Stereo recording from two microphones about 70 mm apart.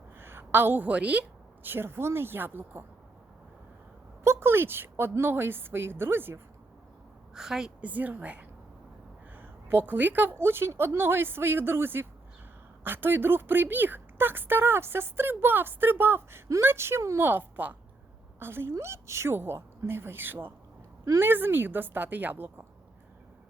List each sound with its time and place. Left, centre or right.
0.2 s a woman's voice: right; by 1.2 s centre
1.6 s speech: right
4.2 s speech: right
7.3 s a woman's voice: centre
7.8 s a woman's voice: right
17.2 s a woman's voice: right